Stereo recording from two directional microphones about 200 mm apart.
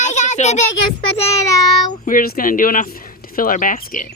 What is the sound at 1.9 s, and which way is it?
Speech, 45° left (ahead or behind).